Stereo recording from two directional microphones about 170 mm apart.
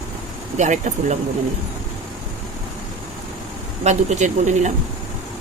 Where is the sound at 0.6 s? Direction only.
45° right (ahead or behind).